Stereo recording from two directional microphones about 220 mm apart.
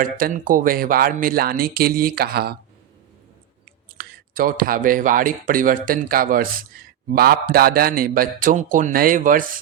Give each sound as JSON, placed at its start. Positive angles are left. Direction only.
{"t": 0.0, "sound": "speech", "side_deg": -40}
{"t": 3.9, "sound": "speech", "side_deg": -40}